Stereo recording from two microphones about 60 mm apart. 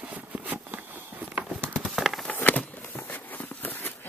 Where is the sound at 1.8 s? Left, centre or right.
Centre.